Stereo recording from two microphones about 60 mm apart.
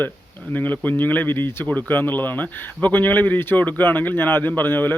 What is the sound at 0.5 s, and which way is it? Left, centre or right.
Speech, left.